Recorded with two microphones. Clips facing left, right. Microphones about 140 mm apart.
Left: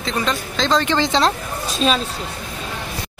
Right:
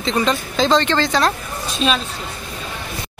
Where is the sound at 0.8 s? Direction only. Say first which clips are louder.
Even; 15° left (ahead or behind).